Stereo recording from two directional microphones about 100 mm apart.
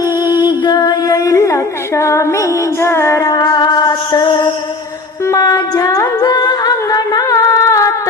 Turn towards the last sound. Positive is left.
turn(degrees=30)  # may be behind; listen again after turning